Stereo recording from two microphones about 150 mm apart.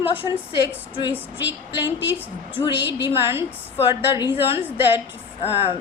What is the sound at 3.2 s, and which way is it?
Speech, 15° right (ahead or behind).